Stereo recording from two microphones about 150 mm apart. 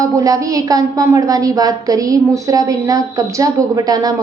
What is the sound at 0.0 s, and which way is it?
Speech, 20° right (ahead or behind).